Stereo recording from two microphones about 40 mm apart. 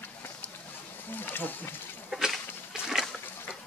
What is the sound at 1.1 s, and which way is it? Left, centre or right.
Speech, left.